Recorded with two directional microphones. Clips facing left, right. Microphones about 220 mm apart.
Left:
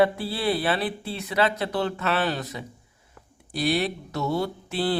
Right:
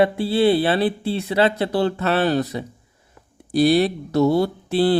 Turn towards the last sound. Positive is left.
turn(degrees=-35)  # may be behind; listen again after turning